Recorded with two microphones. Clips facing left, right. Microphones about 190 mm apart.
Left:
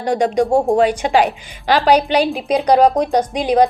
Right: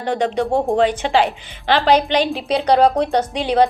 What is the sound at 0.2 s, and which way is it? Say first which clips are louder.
Speech: left 4 dB; 10° left (ahead or behind).